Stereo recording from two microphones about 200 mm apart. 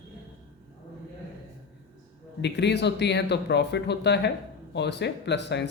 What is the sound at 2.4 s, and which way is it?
Speech, 60° left (ahead or behind).